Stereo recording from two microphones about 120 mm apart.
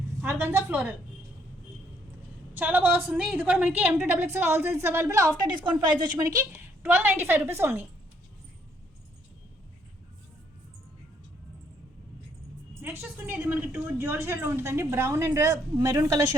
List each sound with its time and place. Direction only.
0.3 s a woman's voice: 20° right (ahead or behind)
2.6 s a woman's voice: 15° right (ahead or behind)
5.5 s a woman's voice: 40° right (ahead or behind)
6.1 s a woman's voice: 30° right (ahead or behind)
6.6 s a woman's voice: 15° right (ahead or behind)
12.8 s a woman's voice: 15° right (ahead or behind)